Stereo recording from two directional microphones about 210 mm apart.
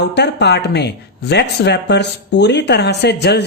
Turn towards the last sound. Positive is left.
turn(degrees=55)  # may be behind; listen again after turning